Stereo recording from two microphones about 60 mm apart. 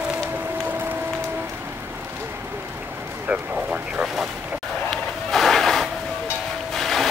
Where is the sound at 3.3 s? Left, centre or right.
Right.